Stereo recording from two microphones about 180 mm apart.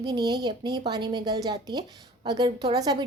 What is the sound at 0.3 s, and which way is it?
A woman's voice, 25° right (ahead or behind).